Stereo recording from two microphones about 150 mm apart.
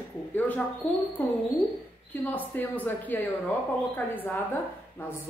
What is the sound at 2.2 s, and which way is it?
A woman's voice, 10° left (ahead or behind).